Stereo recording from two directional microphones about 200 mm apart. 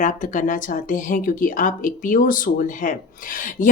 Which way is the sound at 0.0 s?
40° left (ahead or behind).